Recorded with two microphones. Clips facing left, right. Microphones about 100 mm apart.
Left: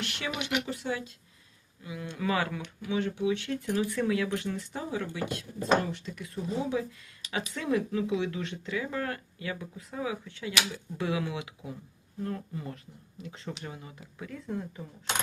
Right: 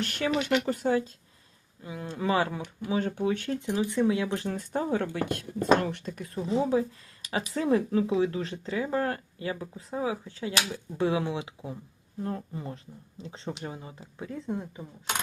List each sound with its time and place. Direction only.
0.0 s speech: 40° right (ahead or behind)
3.0 s speech: 45° right (ahead or behind)
3.7 s speech: 20° right (ahead or behind)
4.4 s speech: 45° right (ahead or behind)
6.1 s speech: 40° right (ahead or behind); by 15.1 s 20° right (ahead or behind)